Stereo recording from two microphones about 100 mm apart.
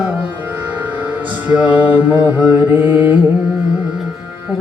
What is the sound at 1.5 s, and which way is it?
Mantra, 15° right (ahead or behind).